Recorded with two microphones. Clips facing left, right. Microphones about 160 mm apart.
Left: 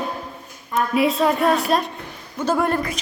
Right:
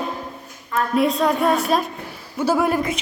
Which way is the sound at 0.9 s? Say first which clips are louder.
Even; centre (ahead or behind).